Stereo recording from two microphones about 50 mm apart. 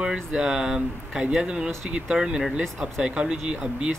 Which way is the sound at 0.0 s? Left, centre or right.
Centre.